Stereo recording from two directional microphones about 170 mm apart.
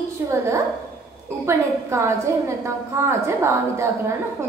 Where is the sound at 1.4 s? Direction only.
15° right (ahead or behind).